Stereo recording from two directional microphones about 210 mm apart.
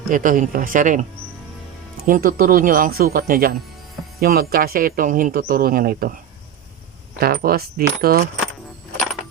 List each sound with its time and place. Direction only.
0.1 s speech: 40° right (ahead or behind)
7.2 s speech: 45° right (ahead or behind)